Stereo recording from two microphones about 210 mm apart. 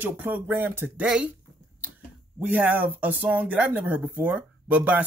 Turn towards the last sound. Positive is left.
turn(degrees=-5)  # may be behind; listen again after turning